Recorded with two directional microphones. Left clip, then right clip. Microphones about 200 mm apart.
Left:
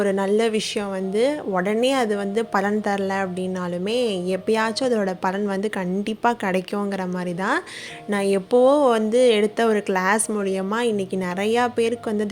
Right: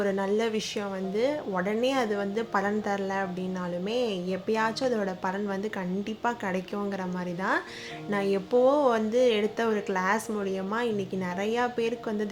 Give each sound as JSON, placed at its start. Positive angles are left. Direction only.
{"t": 0.0, "sound": "speech", "side_deg": 40}
{"t": 8.1, "sound": "speech", "side_deg": 40}